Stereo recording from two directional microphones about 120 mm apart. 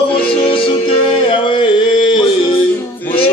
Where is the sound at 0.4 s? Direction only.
50° left (ahead or behind).